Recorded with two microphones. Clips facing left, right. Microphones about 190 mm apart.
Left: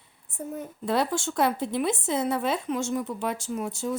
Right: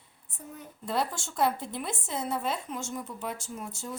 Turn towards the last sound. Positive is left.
turn(degrees=75)  # may be behind; listen again after turning